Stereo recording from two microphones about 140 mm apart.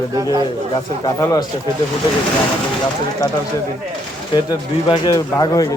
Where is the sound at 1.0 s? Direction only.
30° left (ahead or behind).